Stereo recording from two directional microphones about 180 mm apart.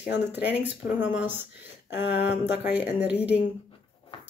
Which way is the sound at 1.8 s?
70° left (ahead or behind).